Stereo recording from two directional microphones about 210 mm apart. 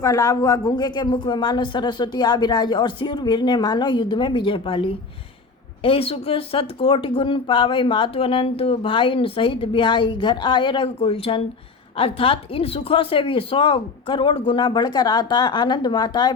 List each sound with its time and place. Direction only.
0.0 s speech: 15° left (ahead or behind)